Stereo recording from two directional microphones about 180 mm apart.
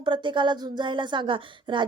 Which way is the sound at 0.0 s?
25° right (ahead or behind).